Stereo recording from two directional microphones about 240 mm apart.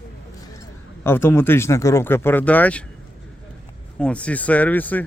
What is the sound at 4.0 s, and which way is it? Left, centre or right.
Speech, centre.